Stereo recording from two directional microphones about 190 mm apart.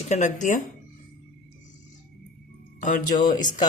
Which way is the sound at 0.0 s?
40° left (ahead or behind).